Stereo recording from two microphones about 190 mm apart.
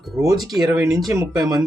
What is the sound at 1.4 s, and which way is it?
Speech, centre (ahead or behind).